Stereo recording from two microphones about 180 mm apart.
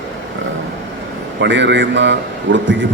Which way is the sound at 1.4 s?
80° right.